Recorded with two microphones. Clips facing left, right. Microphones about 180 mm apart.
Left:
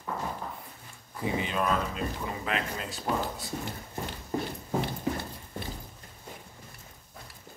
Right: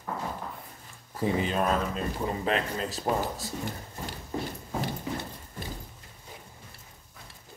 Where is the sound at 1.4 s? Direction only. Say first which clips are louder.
Left 1 dB; 40° right (ahead or behind).